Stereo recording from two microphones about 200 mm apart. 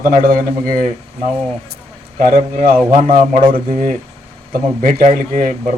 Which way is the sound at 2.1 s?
40° right (ahead or behind).